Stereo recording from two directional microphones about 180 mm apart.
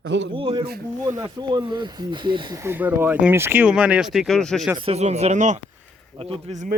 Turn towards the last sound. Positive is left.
turn(degrees=-40)  # may be behind; listen again after turning